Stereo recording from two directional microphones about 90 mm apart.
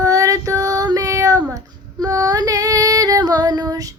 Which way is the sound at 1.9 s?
45° right (ahead or behind).